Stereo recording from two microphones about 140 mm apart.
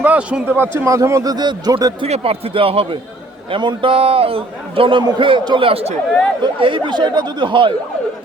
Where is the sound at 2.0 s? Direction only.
45° right (ahead or behind).